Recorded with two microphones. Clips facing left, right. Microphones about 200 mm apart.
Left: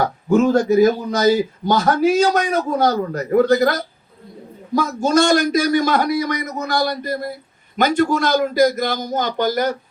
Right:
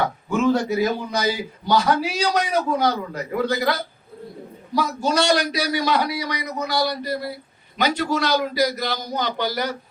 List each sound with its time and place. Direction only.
0.0 s a man's voice: 40° left (ahead or behind)